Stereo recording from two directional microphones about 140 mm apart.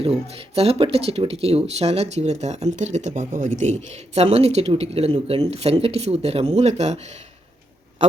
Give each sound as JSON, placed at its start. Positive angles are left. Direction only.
{"t": 0.0, "sound": "speech", "side_deg": -45}